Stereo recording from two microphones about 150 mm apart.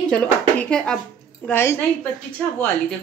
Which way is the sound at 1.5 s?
15° left (ahead or behind).